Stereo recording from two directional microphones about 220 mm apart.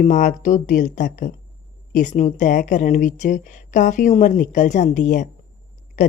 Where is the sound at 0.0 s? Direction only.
35° left (ahead or behind).